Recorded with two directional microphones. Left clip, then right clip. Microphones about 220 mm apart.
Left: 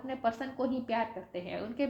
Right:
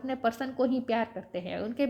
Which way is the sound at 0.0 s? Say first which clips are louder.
Right 3 dB; 50° right (ahead or behind).